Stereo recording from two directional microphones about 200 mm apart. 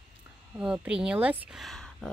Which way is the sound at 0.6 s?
5° right (ahead or behind).